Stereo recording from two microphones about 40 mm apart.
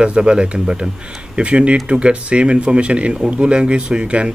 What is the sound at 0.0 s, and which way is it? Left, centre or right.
Speech, right.